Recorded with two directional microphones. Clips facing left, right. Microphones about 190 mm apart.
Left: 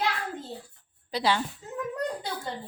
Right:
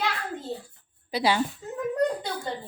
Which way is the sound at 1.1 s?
10° right (ahead or behind).